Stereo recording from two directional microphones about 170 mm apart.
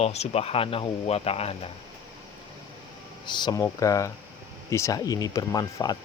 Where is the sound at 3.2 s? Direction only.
25° left (ahead or behind).